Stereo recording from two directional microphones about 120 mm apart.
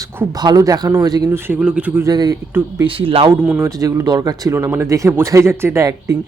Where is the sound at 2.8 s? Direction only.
50° right (ahead or behind).